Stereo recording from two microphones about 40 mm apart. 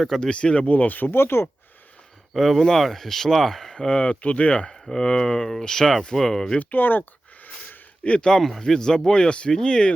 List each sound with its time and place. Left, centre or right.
0.2 s speech: left
0.7 s speech: left
1.1 s speech: left
2.3 s speech: centre
3.8 s speech: left
4.7 s speech: centre
6.6 s a sound: left
8.0 s speech: left
8.4 s speech: centre